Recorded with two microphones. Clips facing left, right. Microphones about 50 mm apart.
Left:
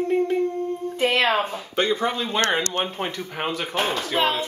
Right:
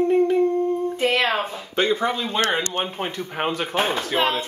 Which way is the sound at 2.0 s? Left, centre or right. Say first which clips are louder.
Right 1 dB; centre.